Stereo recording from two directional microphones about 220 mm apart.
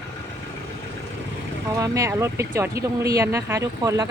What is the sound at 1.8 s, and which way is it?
Speech, 15° right (ahead or behind).